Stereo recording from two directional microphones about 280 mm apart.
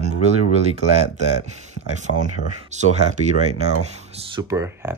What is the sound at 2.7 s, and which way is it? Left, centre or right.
Speech, right.